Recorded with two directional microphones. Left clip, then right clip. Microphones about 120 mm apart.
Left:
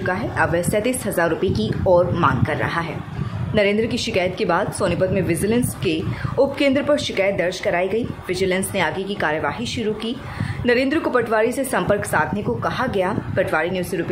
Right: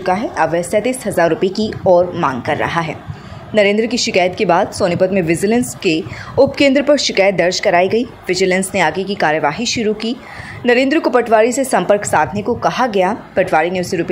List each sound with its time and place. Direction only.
0.0 s a woman's voice: 35° right (ahead or behind)
2.2 s a woman's voice: 40° right (ahead or behind)